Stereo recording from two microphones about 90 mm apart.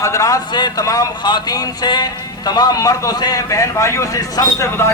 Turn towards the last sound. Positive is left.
turn(degrees=40)  # may be behind; listen again after turning